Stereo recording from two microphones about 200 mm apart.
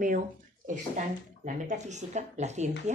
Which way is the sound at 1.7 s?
35° right (ahead or behind).